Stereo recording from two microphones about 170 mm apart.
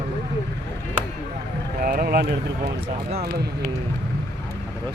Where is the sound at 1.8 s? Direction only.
60° right (ahead or behind).